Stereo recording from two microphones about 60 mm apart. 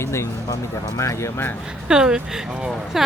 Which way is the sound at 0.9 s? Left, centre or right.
Left.